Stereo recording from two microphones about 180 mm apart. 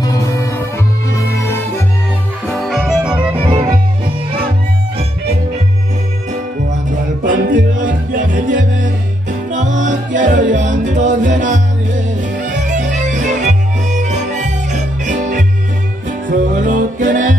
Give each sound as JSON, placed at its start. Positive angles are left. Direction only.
{"t": 0.0, "sound": "music", "side_deg": 20}
{"t": 2.5, "sound": "music", "side_deg": 0}
{"t": 7.2, "sound": "music", "side_deg": -50}